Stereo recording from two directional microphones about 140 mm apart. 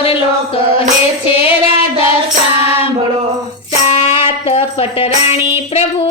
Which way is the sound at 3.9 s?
40° left (ahead or behind).